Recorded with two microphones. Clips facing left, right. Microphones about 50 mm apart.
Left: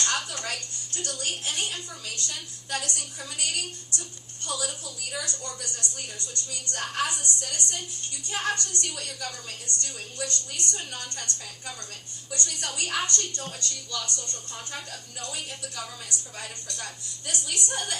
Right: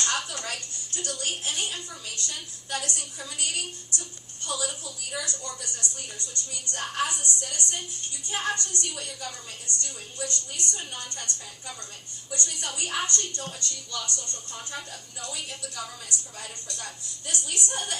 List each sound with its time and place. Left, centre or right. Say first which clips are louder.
0.3 s music: left 1 dB; left
1.2 s a woman's voice: left 1 dB; left
12.4 s a woman's voice: left 1 dB; left